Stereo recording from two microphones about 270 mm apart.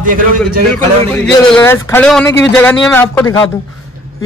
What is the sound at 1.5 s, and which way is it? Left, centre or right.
Speech, centre.